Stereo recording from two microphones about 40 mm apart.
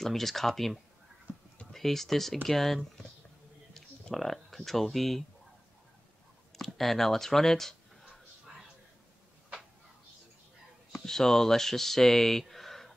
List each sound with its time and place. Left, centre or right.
0.0 s speech: centre
6.5 s speech: centre
11.1 s speech: centre